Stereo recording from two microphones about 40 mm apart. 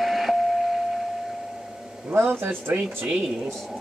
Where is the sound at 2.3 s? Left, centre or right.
Right.